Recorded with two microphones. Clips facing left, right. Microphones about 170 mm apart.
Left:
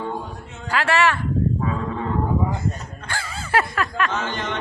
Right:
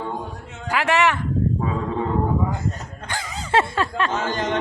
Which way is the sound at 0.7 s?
15° right (ahead or behind).